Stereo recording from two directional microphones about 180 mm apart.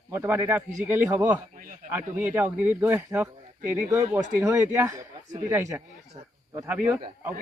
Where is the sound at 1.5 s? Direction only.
50° right (ahead or behind).